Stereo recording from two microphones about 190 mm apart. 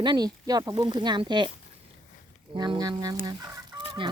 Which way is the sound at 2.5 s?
20° right (ahead or behind).